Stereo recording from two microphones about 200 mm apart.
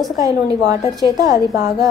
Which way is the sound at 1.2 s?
20° right (ahead or behind).